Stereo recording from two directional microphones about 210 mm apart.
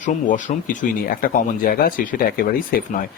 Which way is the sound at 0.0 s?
35° left (ahead or behind).